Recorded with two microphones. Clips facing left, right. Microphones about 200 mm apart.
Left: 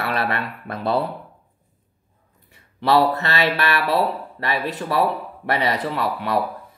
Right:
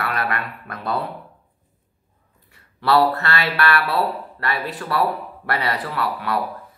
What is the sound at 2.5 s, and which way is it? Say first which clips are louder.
Speech: even; 20° left (ahead or behind).